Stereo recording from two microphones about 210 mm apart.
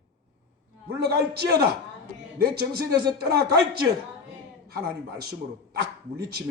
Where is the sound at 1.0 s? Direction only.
50° right (ahead or behind).